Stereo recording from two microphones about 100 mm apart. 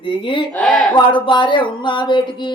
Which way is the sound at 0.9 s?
55° left (ahead or behind).